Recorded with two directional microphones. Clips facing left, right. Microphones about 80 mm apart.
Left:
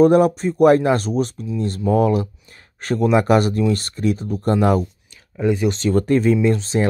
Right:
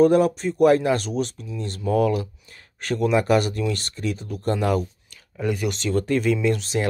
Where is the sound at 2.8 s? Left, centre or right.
Left.